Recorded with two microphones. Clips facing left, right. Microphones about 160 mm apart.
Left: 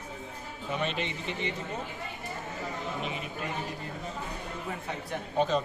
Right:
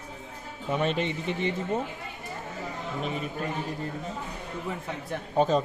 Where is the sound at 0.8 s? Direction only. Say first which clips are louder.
Right 6 dB; 45° right (ahead or behind).